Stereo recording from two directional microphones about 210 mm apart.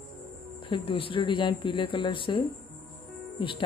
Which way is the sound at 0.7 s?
25° left (ahead or behind).